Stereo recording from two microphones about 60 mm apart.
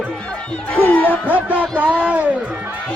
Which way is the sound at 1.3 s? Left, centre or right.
Right.